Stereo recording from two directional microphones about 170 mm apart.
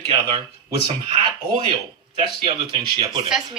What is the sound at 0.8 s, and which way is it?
Speech, 30° right (ahead or behind).